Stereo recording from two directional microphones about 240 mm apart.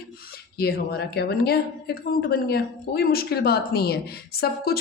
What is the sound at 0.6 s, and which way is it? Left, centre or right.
Speech, left.